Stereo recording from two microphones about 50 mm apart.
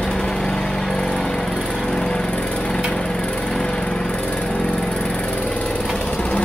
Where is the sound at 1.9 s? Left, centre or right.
Left.